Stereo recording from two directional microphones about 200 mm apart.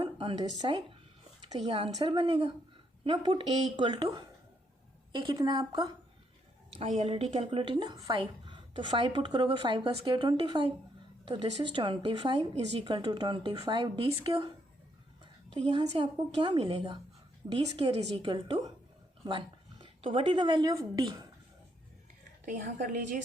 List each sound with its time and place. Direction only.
0.0 s speech: 25° right (ahead or behind)
6.7 s speech: 35° right (ahead or behind)
15.5 s speech: 25° right (ahead or behind)
19.8 s speech: 25° right (ahead or behind)
22.4 s a woman's voice: 40° right (ahead or behind)